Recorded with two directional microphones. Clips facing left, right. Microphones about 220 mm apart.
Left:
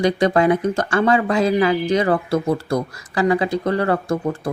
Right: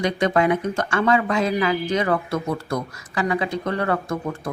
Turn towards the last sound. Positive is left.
turn(degrees=30)  # may be behind; listen again after turning